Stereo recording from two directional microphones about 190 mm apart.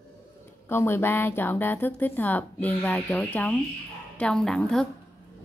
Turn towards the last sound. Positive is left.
turn(degrees=5)  # may be behind; listen again after turning